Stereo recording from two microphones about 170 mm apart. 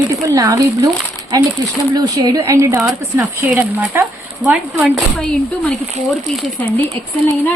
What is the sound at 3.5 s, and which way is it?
A woman's voice, 5° right (ahead or behind).